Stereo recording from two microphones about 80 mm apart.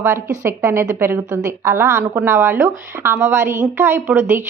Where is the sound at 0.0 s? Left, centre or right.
Right.